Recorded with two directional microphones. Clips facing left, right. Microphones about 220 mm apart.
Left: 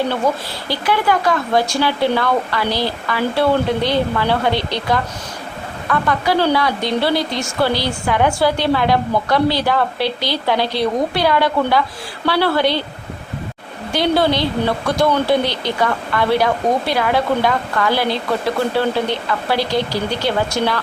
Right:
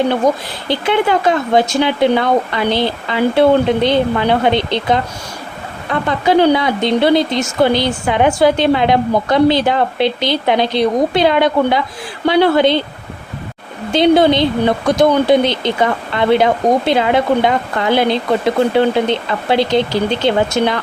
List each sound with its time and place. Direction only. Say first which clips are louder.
0.7 s speech: right 4 dB; 20° right (ahead or behind)
13.9 s speech: right 6 dB; 20° right (ahead or behind)